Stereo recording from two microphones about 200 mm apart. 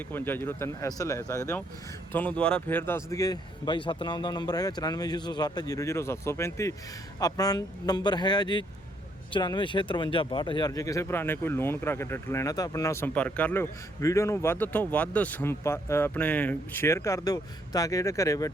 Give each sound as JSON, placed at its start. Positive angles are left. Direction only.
{"t": 0.1, "sound": "speech", "side_deg": 10}